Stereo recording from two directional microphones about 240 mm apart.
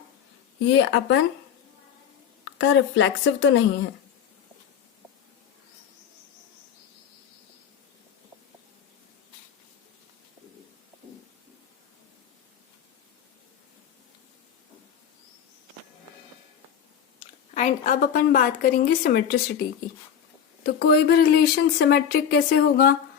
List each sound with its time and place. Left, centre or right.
0.7 s speech: left
2.4 s a woman's voice: left
17.2 s a woman's voice: left
20.7 s speech: left